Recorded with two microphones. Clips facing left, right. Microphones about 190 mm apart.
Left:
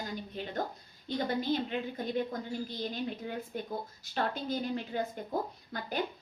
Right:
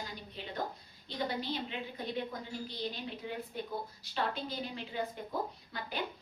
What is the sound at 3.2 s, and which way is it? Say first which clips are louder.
A woman's voice: left 2 dB; 45° left (ahead or behind).